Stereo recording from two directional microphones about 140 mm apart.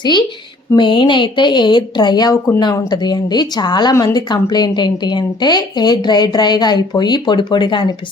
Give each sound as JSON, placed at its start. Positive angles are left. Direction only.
{"t": 0.0, "sound": "speech", "side_deg": 35}